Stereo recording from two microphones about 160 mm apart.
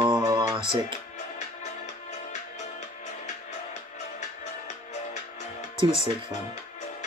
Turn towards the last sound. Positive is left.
turn(degrees=-35)  # may be behind; listen again after turning